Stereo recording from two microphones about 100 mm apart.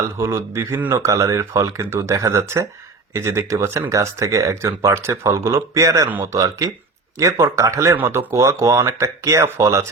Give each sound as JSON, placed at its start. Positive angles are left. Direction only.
{"t": 0.2, "sound": "speech", "side_deg": -25}
{"t": 6.1, "sound": "speech", "side_deg": -20}
{"t": 6.3, "sound": "speech", "side_deg": -35}